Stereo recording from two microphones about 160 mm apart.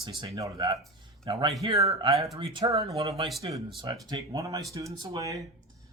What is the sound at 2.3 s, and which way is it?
Speech, 35° right (ahead or behind).